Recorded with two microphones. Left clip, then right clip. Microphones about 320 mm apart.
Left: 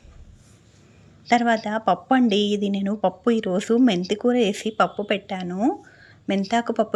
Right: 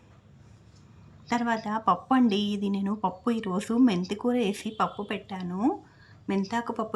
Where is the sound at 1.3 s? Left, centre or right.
Centre.